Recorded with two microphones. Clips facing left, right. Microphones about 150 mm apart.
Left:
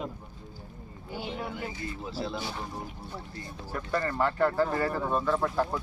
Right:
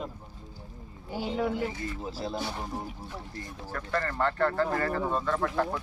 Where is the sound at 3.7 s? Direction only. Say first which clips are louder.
Left 1 dB; 15° left (ahead or behind).